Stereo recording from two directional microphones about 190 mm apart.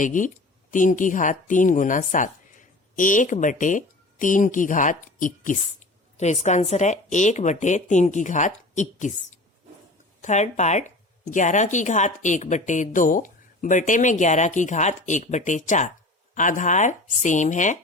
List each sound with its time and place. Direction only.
0.0 s a woman's voice: 40° left (ahead or behind)
10.2 s a woman's voice: 40° left (ahead or behind)